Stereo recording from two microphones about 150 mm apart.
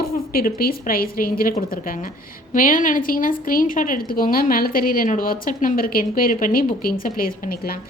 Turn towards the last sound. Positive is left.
turn(degrees=75)  # may be behind; listen again after turning